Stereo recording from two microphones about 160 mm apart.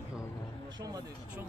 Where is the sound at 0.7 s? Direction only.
25° right (ahead or behind).